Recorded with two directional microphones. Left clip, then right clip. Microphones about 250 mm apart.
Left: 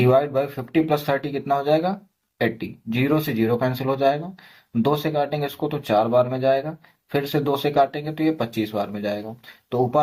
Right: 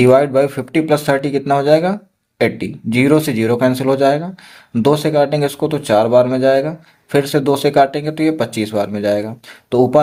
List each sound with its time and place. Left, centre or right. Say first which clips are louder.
0.0 s speech: right 8 dB; right